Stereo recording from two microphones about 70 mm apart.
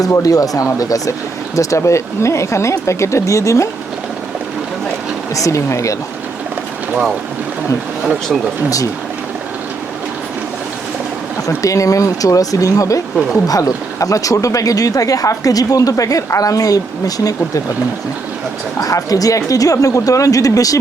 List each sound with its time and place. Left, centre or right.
0.1 s speech: left
1.5 s speech: left
5.3 s speech: left
11.4 s speech: left
18.8 s speech: left